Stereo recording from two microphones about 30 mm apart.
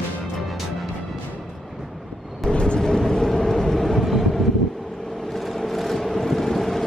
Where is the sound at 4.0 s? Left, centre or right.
Centre.